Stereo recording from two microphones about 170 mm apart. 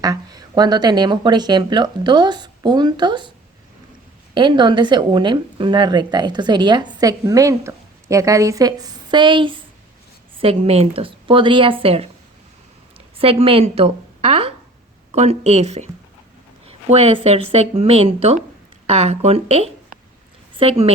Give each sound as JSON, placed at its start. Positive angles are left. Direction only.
{"t": 0.0, "sound": "speech", "side_deg": -20}
{"t": 4.4, "sound": "speech", "side_deg": -25}
{"t": 13.1, "sound": "a woman's voice", "side_deg": -35}
{"t": 16.6, "sound": "a sound", "side_deg": -40}
{"t": 17.2, "sound": "speech", "side_deg": -35}